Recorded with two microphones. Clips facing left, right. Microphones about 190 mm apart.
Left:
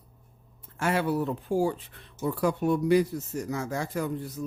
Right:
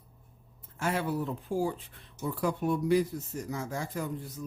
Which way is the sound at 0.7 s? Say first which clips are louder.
Left 4 dB; 75° left (ahead or behind).